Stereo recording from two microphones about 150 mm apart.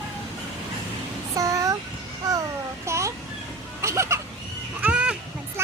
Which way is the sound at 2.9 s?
20° right (ahead or behind).